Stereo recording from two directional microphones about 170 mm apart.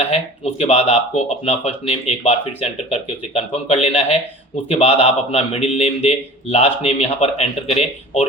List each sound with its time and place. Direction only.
0.6 s speech: 40° left (ahead or behind)